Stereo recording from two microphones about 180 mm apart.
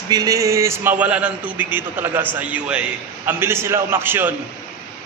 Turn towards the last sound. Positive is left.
turn(degrees=-10)  # may be behind; listen again after turning